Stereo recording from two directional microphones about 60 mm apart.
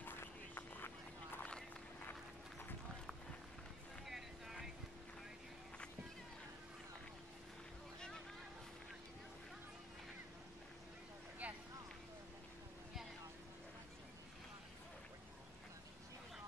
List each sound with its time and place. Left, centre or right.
0.0 s a sound: left
4.0 s boat: centre
11.4 s vehicle: right